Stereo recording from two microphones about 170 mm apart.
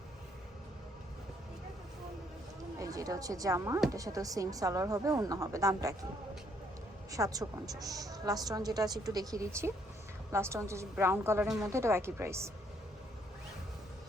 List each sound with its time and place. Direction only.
2.7 s a woman's voice: 20° right (ahead or behind)
7.1 s a woman's voice: 20° right (ahead or behind)
11.4 s speech: 5° right (ahead or behind)
11.7 s a woman's voice: 15° right (ahead or behind)